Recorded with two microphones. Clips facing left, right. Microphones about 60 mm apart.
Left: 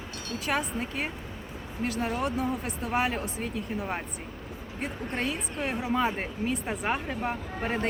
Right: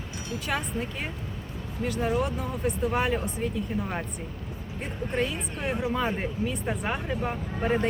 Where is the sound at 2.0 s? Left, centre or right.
Centre.